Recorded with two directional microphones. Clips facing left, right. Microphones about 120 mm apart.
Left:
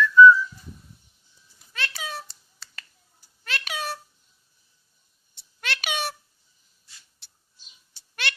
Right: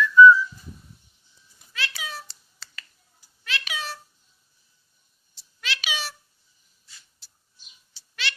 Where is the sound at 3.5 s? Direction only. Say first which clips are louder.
Left 2 dB; 50° left (ahead or behind).